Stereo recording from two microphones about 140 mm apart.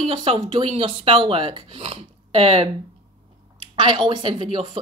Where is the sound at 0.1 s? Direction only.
40° right (ahead or behind).